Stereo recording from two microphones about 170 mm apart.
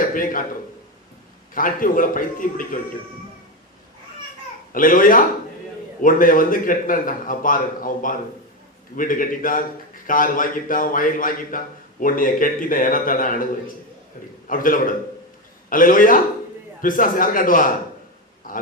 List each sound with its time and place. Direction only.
0.0 s a man's voice: 50° left (ahead or behind)
1.5 s a man's voice: 55° left (ahead or behind)
4.7 s a man's voice: 55° left (ahead or behind)
18.5 s a sound: 55° left (ahead or behind)